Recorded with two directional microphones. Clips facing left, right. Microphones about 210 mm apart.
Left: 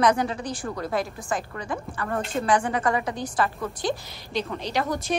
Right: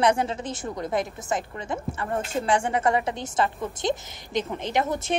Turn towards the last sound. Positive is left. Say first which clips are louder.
# right 1 dB
turn(degrees=-25)  # may be behind; listen again after turning